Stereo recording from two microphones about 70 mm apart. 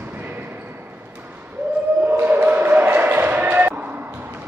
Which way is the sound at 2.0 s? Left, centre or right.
Right.